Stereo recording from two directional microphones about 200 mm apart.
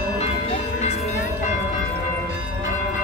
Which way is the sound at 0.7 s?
35° left (ahead or behind).